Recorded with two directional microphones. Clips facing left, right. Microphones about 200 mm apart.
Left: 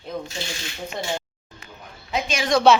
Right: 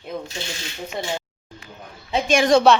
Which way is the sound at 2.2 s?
50° right (ahead or behind).